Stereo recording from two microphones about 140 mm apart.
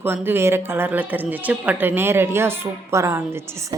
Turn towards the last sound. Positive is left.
turn(degrees=-20)  # may be behind; listen again after turning